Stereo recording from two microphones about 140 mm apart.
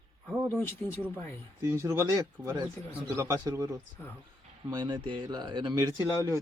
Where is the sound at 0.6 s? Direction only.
15° left (ahead or behind).